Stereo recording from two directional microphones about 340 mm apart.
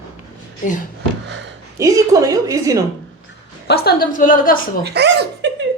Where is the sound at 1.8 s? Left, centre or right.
Centre.